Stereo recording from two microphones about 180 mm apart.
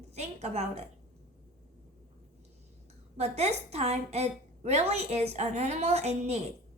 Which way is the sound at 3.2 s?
35° right (ahead or behind).